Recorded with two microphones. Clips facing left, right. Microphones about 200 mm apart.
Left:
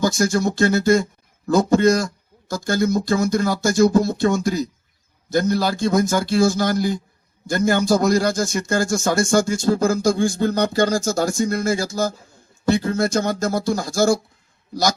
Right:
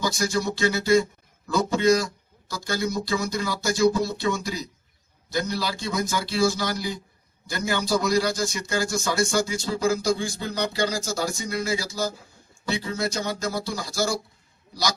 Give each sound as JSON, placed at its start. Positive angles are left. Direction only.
{"t": 0.0, "sound": "speech", "side_deg": 45}